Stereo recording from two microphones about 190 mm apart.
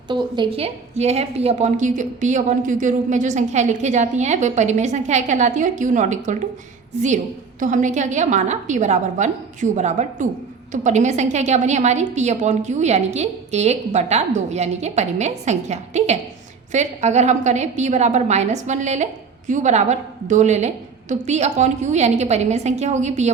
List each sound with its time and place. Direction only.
0.1 s a woman's voice: 25° right (ahead or behind)
7.6 s a woman's voice: 40° right (ahead or behind)